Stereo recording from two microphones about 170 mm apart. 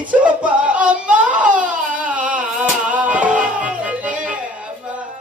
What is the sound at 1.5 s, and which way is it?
Crying, 50° right (ahead or behind).